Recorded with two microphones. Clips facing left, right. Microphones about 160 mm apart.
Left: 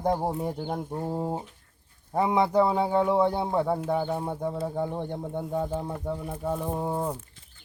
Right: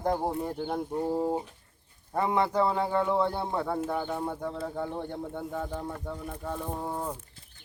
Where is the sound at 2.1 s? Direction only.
15° left (ahead or behind).